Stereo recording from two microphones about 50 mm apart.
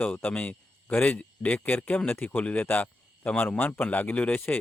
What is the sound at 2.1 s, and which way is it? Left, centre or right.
Speech, left.